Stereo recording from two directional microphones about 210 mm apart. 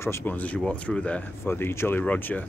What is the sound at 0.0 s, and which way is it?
Speech, 10° left (ahead or behind).